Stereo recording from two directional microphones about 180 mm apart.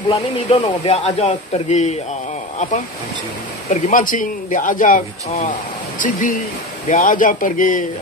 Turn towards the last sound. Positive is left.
turn(degrees=50)  # may be behind; listen again after turning